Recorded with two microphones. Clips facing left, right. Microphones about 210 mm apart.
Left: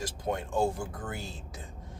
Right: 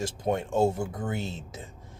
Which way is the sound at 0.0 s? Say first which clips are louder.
Right 5 dB; 25° right (ahead or behind).